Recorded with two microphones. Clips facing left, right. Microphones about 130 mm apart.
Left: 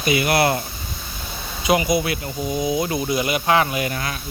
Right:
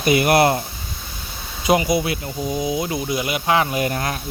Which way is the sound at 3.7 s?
40° right (ahead or behind).